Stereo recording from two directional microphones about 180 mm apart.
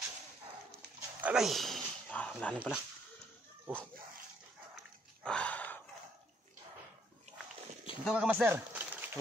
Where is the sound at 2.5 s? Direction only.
5° right (ahead or behind).